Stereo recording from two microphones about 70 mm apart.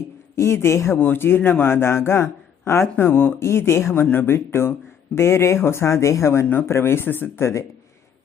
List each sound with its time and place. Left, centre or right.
0.3 s speech: left
1.0 s speech: left
4.0 s speech: left